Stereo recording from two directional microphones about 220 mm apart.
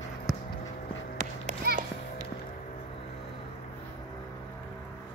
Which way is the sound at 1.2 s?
35° right (ahead or behind).